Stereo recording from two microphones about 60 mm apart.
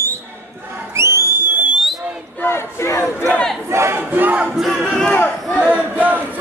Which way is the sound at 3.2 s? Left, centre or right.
Centre.